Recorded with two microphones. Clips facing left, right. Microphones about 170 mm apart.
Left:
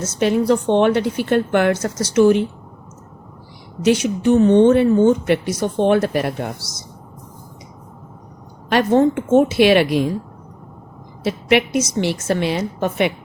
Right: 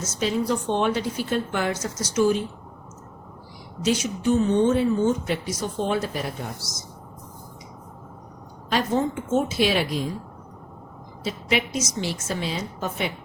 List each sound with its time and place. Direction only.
0.0 s speech: 65° left (ahead or behind)
3.8 s speech: 65° left (ahead or behind)
8.7 s a woman's voice: 65° left (ahead or behind)
11.2 s a woman's voice: 65° left (ahead or behind)